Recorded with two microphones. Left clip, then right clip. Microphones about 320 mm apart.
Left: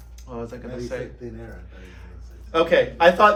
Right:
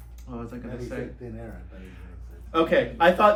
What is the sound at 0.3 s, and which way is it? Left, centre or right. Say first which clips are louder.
Speech: left 4 dB; left.